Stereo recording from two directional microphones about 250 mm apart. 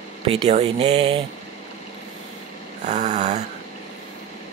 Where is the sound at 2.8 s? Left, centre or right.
Right.